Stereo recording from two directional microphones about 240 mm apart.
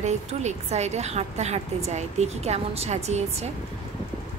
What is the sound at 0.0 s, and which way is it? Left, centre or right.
Speech, right.